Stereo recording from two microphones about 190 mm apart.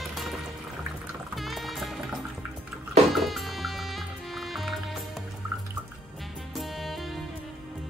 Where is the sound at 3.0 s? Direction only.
Centre (ahead or behind).